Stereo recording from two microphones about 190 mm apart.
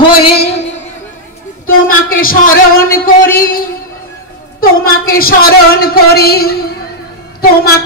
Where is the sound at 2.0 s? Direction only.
50° left (ahead or behind).